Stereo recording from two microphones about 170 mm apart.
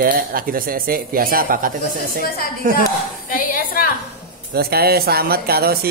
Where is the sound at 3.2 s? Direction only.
55° left (ahead or behind).